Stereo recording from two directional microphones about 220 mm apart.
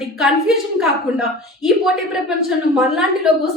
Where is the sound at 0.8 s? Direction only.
Centre (ahead or behind).